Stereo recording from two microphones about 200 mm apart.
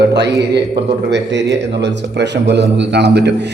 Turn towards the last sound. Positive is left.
turn(degrees=-55)  # may be behind; listen again after turning